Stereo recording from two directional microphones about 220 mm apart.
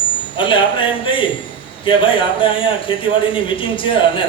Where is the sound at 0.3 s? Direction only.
20° left (ahead or behind).